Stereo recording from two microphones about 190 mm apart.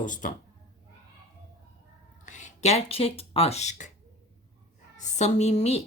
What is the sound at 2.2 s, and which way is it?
Speech, 40° left (ahead or behind).